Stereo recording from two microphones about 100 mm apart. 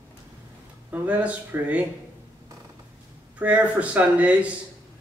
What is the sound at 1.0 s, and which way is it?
Speech, 15° right (ahead or behind).